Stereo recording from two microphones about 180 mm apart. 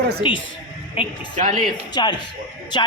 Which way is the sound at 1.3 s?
45° right (ahead or behind).